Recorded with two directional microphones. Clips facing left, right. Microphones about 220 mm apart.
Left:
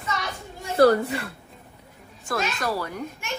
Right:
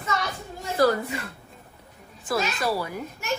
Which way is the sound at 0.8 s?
35° left (ahead or behind).